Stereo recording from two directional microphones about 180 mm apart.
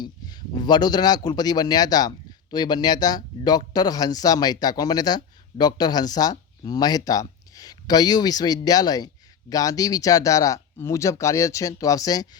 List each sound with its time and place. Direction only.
0.0 s a man's voice: 25° left (ahead or behind)